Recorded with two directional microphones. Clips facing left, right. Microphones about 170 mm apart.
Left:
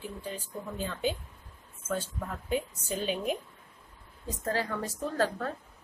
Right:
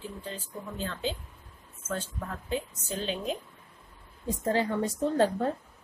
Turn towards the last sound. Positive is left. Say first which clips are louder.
# right 5 dB
turn(degrees=-25)  # may be behind; listen again after turning